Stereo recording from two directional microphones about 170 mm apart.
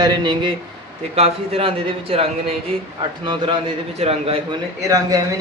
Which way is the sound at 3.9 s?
35° right (ahead or behind).